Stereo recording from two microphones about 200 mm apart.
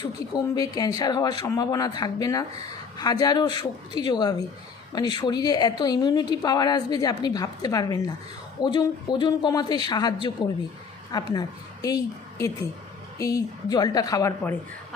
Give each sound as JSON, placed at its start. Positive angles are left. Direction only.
{"t": 0.0, "sound": "a woman's voice", "side_deg": 20}